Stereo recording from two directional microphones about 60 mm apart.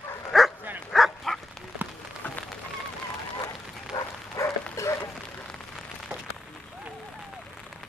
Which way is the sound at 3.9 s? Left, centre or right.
Left.